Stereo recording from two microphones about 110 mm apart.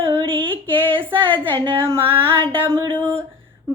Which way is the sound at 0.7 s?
50° right (ahead or behind).